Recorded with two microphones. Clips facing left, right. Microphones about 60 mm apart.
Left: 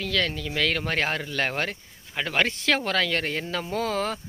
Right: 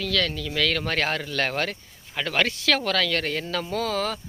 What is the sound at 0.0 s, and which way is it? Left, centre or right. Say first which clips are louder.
Speech: right 1 dB; left.